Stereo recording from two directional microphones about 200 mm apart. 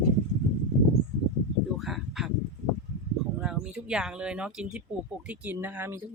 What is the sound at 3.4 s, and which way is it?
Speech, 5° right (ahead or behind).